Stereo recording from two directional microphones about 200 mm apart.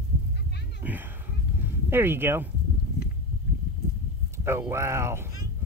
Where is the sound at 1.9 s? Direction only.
10° right (ahead or behind).